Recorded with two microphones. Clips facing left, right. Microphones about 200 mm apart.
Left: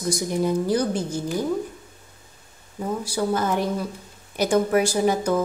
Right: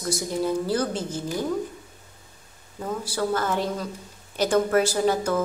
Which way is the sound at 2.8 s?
15° left (ahead or behind).